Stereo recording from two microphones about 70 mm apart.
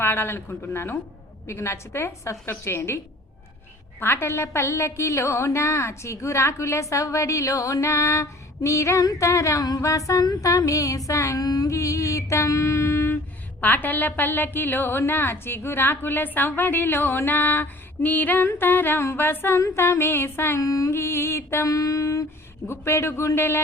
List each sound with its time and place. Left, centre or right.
0.0 s a woman's voice: left
4.0 s a woman's voice: left
11.4 s a sound: left
11.7 s a sound: left
13.6 s a woman's voice: left
20.6 s a woman's voice: left
21.7 s a woman's voice: left